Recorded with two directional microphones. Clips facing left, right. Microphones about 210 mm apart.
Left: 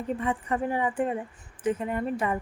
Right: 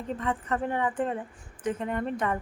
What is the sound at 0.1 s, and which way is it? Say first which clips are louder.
A woman's voice: left 1 dB; 10° left (ahead or behind).